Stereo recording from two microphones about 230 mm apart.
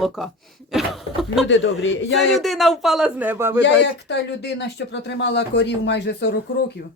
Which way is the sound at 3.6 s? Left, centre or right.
Left.